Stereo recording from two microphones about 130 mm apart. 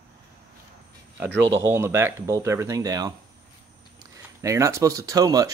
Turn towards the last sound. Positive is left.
turn(degrees=-30)  # may be behind; listen again after turning